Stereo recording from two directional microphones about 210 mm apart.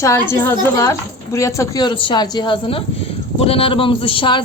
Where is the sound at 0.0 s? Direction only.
10° left (ahead or behind).